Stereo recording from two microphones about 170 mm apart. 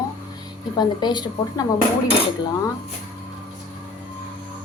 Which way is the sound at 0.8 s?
25° left (ahead or behind).